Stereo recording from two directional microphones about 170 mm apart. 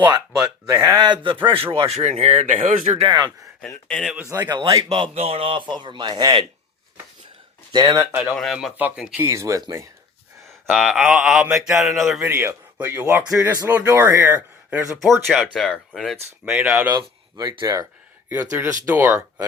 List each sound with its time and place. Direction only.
0.3 s a man's voice: 5° right (ahead or behind)
0.8 s speech: 20° right (ahead or behind); by 3.0 s 45° right (ahead or behind)
3.0 s speech: 25° right (ahead or behind)
3.8 s speech: centre (ahead or behind)
4.3 s speech: 20° right (ahead or behind)
4.9 s speech: 35° right (ahead or behind)
7.7 s speech: 20° right (ahead or behind)
8.2 s speech: centre (ahead or behind); by 9.9 s 20° right (ahead or behind)
10.7 s speech: centre (ahead or behind)
12.2 s a man's voice: 15° right (ahead or behind)
15.3 s a man's voice: centre (ahead or behind)
16.9 s speech: 25° right (ahead or behind)
18.5 s a man's voice: 15° right (ahead or behind)